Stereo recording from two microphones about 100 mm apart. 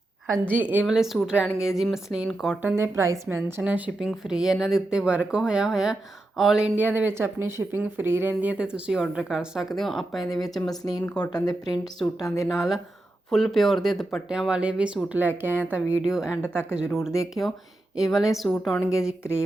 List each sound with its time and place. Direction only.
0.5 s speech: 15° right (ahead or behind)
0.9 s speech: 5° right (ahead or behind)
2.6 s speech: 20° right (ahead or behind)
3.6 s speech: 15° right (ahead or behind)
6.7 s speech: 15° right (ahead or behind); by 10.4 s centre (ahead or behind)
10.7 s speech: 40° left (ahead or behind)
12.5 s speech: 5° right (ahead or behind); by 15.8 s 20° right (ahead or behind)
16.0 s speech: 5° right (ahead or behind)
16.4 s speech: 20° left (ahead or behind)
16.7 s speech: 5° right (ahead or behind)